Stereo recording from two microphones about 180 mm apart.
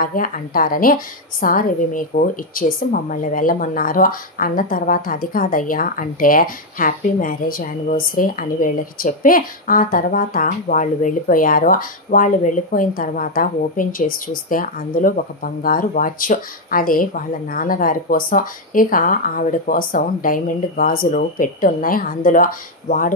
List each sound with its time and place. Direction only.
0.0 s a woman's voice: 50° left (ahead or behind)